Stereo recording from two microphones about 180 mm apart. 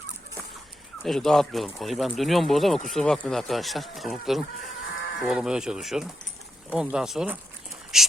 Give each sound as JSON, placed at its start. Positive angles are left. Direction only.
{"t": 1.0, "sound": "speech", "side_deg": 0}